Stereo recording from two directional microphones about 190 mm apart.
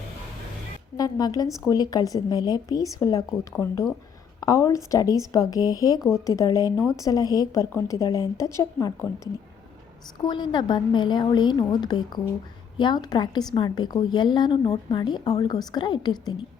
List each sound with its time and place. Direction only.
0.9 s a woman's voice: 20° left (ahead or behind)
6.0 s speech: centre (ahead or behind)
6.2 s a woman's voice: 15° left (ahead or behind)